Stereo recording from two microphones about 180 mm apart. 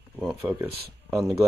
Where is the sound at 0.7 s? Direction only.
60° right (ahead or behind).